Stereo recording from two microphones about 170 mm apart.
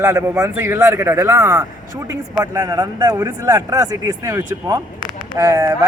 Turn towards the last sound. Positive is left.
turn(degrees=-20)  # may be behind; listen again after turning